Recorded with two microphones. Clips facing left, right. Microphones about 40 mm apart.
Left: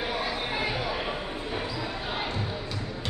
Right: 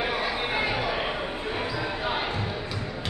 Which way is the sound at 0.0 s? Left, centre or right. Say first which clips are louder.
Right 3 dB; right.